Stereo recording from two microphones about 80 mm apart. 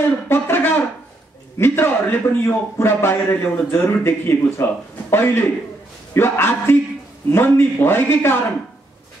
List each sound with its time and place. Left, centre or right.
0.3 s a man's voice: left